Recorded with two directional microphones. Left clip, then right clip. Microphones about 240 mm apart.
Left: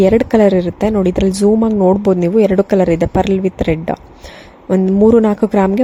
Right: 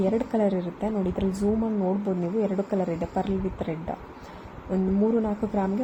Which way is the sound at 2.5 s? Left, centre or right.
Left.